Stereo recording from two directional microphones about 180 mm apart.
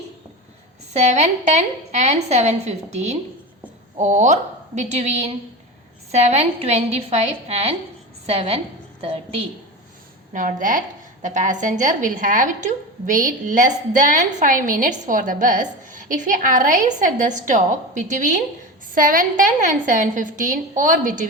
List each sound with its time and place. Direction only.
0.9 s a woman's voice: 40° right (ahead or behind)
10.3 s a woman's voice: 45° right (ahead or behind)